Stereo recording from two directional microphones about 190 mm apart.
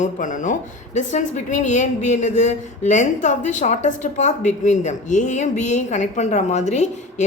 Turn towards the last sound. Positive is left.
turn(degrees=35)  # may be behind; listen again after turning